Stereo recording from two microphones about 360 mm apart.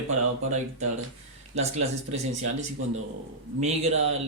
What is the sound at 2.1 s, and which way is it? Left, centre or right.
Speech, centre.